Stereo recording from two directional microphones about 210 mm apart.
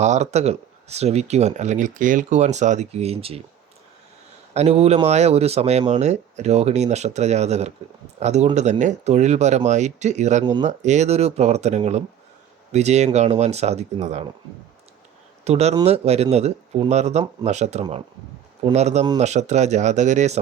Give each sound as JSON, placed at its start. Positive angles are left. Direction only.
{"t": 0.0, "sound": "speech", "side_deg": -35}
{"t": 4.5, "sound": "speech", "side_deg": -30}
{"t": 15.4, "sound": "speech", "side_deg": -30}